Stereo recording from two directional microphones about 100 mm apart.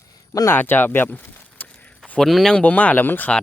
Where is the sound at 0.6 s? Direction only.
20° left (ahead or behind).